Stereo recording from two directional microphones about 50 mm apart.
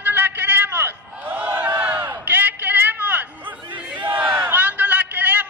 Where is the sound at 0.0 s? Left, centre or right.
Right.